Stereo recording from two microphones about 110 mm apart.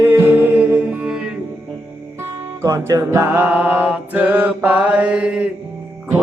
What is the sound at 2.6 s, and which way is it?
Mantra, 30° right (ahead or behind).